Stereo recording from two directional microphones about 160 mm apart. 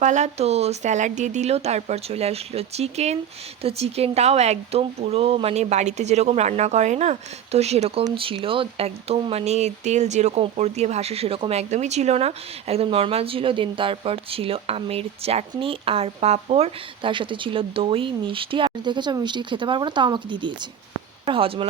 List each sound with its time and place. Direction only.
0.0 s speech: 45° right (ahead or behind)